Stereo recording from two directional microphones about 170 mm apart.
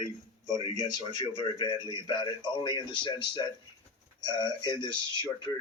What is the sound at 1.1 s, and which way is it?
Speech, 25° left (ahead or behind).